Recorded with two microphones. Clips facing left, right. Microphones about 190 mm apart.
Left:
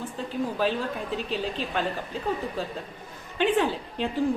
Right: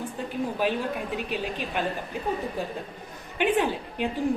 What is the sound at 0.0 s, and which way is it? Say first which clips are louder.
A woman's voice: even; 15° right (ahead or behind).